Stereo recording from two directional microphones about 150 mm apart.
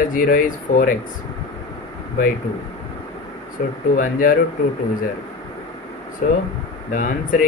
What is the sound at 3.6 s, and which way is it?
Speech, 60° left (ahead or behind).